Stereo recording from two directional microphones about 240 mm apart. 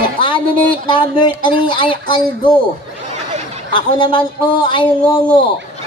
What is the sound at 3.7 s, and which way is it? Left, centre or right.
Speech, centre.